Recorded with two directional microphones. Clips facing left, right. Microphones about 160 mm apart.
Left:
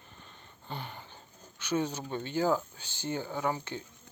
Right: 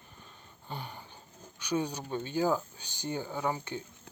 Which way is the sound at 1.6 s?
15° right (ahead or behind).